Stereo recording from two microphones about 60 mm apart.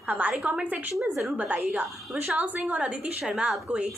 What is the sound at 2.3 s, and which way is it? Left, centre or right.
A woman's voice, right.